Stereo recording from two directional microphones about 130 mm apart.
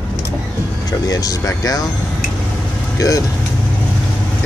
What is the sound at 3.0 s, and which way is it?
Speech, 25° left (ahead or behind).